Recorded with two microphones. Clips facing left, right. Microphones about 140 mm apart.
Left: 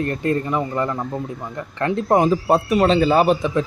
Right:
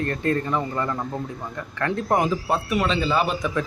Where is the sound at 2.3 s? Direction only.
40° left (ahead or behind).